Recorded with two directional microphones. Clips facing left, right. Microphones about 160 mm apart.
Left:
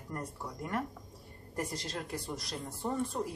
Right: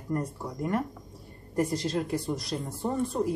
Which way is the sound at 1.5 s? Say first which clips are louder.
Right 10 dB; 25° right (ahead or behind).